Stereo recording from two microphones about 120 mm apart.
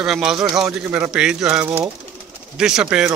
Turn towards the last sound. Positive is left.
turn(degrees=-10)  # may be behind; listen again after turning